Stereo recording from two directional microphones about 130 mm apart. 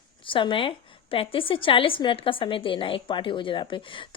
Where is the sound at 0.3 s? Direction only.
40° left (ahead or behind).